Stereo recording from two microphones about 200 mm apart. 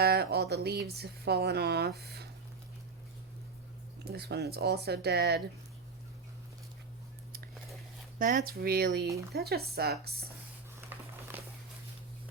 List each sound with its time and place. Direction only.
0.0 s speech: 55° right (ahead or behind)
4.0 s speech: 55° right (ahead or behind)
8.2 s speech: 45° right (ahead or behind)
10.8 s a sound: 10° right (ahead or behind)